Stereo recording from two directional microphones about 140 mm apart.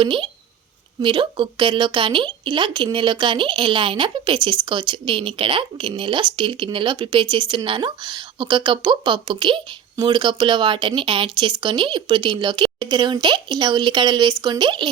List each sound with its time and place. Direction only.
0.0 s speech: 35° right (ahead or behind)